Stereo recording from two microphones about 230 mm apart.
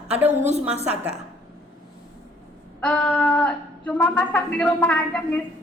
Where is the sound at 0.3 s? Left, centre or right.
Right.